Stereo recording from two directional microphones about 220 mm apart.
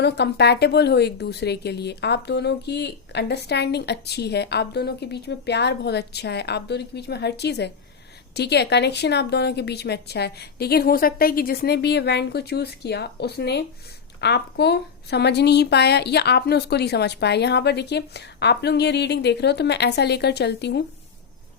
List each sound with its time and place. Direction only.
0.0 s a woman's voice: 50° left (ahead or behind)